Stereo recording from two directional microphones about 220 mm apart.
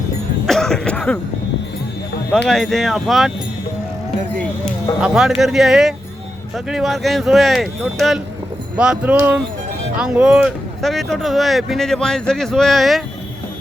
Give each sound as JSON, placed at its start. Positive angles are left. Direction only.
{"t": 0.4, "sound": "cough", "side_deg": 0}
{"t": 2.5, "sound": "speech", "side_deg": 0}
{"t": 4.6, "sound": "speech", "side_deg": -5}